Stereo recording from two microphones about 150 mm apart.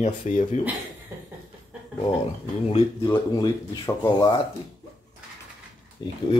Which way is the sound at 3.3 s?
30° left (ahead or behind).